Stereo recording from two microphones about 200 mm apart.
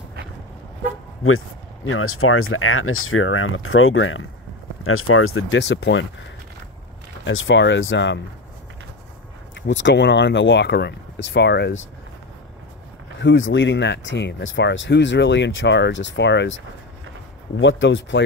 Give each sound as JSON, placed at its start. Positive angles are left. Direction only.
{"t": 1.9, "sound": "speech", "side_deg": 90}
{"t": 4.8, "sound": "speech", "side_deg": 90}
{"t": 7.2, "sound": "speech", "side_deg": 65}
{"t": 9.6, "sound": "speech", "side_deg": 65}
{"t": 13.2, "sound": "speech", "side_deg": 65}
{"t": 17.6, "sound": "speech", "side_deg": 65}